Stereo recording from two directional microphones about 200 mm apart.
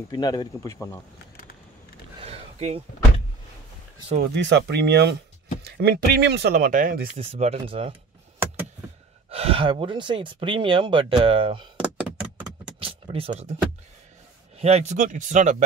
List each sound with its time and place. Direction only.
0.1 s speech: 20° left (ahead or behind)
2.2 s a sound: 30° right (ahead or behind)
4.2 s speech: 60° right (ahead or behind); by 7.1 s 45° right (ahead or behind)
7.2 s speech: 30° right (ahead or behind)
9.3 s speech: 30° right (ahead or behind)
11.7 s door: 5° right (ahead or behind)
12.8 s a sound: 30° right (ahead or behind)
14.6 s speech: 30° right (ahead or behind)